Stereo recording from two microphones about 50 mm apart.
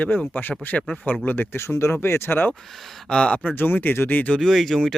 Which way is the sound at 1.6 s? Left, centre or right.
Left.